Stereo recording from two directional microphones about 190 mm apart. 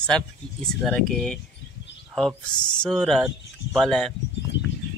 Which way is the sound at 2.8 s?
5° left (ahead or behind).